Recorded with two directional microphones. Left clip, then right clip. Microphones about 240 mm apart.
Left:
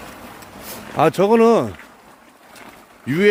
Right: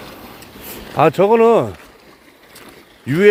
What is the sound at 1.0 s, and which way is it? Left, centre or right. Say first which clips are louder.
Speech: right 2 dB; centre.